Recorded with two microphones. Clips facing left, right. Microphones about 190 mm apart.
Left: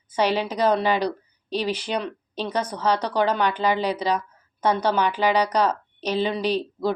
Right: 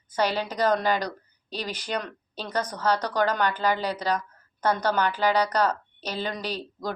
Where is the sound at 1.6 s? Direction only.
10° left (ahead or behind).